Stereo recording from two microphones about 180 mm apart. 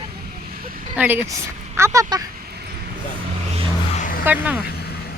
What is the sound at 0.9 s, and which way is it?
Speech, 10° right (ahead or behind).